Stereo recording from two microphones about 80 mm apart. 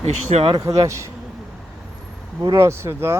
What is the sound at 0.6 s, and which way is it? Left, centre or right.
Speech, right.